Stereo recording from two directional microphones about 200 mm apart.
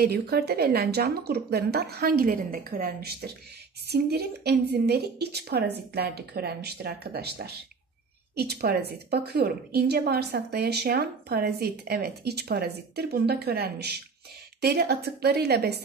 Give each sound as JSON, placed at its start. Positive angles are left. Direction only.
{"t": 0.0, "sound": "a woman's voice", "side_deg": -50}